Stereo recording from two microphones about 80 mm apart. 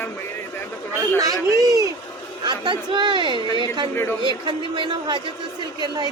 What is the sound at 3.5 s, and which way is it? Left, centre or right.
A man's voice, right.